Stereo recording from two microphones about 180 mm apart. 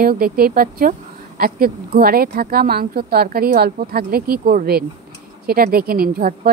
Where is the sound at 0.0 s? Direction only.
55° right (ahead or behind).